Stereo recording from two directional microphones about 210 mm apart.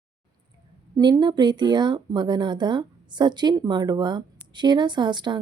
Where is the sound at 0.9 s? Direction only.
20° right (ahead or behind).